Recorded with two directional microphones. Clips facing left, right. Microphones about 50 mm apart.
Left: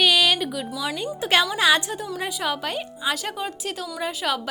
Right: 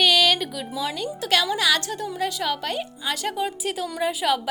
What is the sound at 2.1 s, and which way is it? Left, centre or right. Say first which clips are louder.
A woman's voice: right 1 dB; centre.